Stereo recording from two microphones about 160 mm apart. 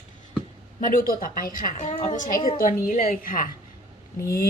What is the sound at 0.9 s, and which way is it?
A woman's voice, 60° left (ahead or behind).